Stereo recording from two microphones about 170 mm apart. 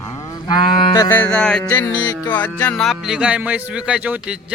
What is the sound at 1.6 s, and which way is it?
Cattle, 20° left (ahead or behind).